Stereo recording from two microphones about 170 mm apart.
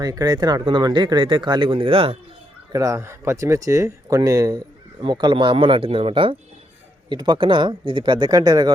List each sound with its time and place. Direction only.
0.0 s speech: 20° right (ahead or behind)
2.7 s speech: 20° right (ahead or behind)